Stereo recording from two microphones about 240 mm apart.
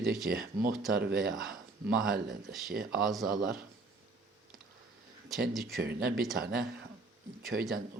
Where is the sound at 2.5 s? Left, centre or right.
Centre.